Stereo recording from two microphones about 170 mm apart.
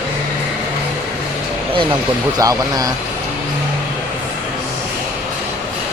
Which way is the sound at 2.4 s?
20° right (ahead or behind).